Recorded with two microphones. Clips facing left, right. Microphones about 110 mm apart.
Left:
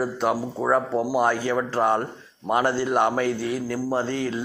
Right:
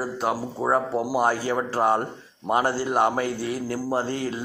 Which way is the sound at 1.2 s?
35° right (ahead or behind).